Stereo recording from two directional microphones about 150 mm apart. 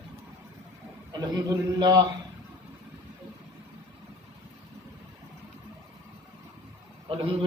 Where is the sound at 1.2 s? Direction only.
25° right (ahead or behind).